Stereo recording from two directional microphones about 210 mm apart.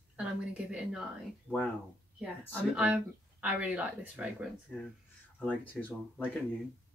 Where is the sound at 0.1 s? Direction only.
5° right (ahead or behind).